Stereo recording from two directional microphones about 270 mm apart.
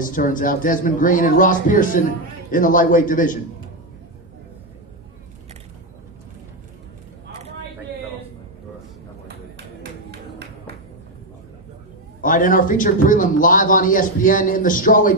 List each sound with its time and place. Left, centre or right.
0.0 s a man's voice: left
12.2 s a man's voice: left